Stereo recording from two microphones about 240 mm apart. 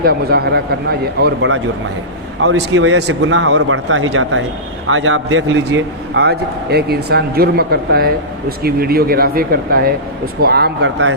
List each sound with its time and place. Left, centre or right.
0.0 s a man's voice: right